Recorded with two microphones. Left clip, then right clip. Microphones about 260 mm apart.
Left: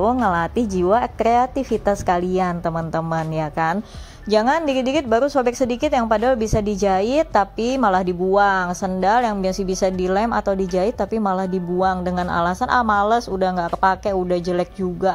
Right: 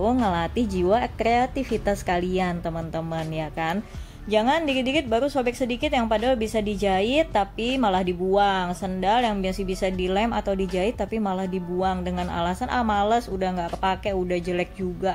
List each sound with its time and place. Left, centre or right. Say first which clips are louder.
0.0 s a woman's voice: left 5 dB; centre
4.3 s a woman's voice: left 4 dB; centre